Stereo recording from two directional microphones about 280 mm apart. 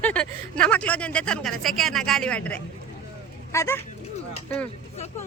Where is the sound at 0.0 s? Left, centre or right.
Centre.